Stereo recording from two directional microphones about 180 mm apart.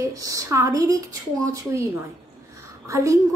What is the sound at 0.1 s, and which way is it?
Speech, 20° right (ahead or behind).